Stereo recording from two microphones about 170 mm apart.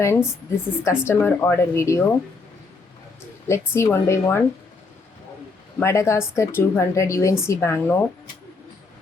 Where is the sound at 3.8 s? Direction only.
15° left (ahead or behind).